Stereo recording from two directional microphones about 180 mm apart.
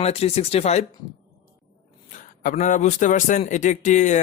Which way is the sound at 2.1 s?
45° left (ahead or behind).